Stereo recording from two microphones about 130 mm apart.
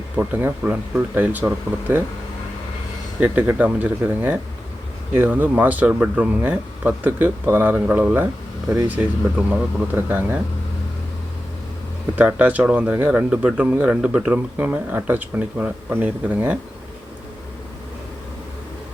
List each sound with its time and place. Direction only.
0.2 s speech: 10° right (ahead or behind)
3.2 s speech: 15° right (ahead or behind)
9.5 s speech: 15° right (ahead or behind)
12.1 s speech: 10° right (ahead or behind)